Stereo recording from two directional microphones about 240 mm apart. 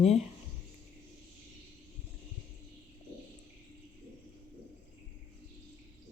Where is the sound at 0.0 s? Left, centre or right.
Left.